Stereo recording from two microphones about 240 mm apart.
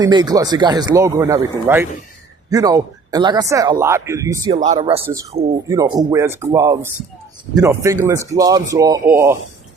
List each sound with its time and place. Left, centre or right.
0.0 s speech: centre
4.5 s speech: right
5.6 s speech: centre